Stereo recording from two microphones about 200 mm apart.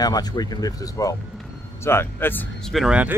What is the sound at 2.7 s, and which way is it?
Speech, 5° right (ahead or behind).